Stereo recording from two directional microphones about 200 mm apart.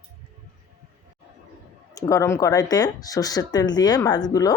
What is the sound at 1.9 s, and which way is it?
Speech, 15° left (ahead or behind).